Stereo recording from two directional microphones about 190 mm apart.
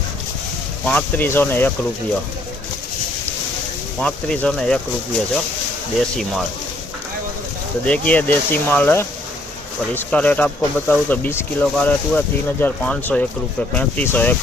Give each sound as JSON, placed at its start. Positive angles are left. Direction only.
{"t": 0.9, "sound": "speech", "side_deg": 10}
{"t": 4.0, "sound": "speech", "side_deg": 5}
{"t": 6.0, "sound": "speech", "side_deg": 0}
{"t": 7.9, "sound": "speech", "side_deg": 5}